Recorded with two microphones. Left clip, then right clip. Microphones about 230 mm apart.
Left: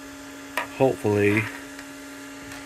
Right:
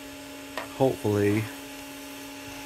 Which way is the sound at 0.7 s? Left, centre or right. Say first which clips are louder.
Left 3 dB; centre.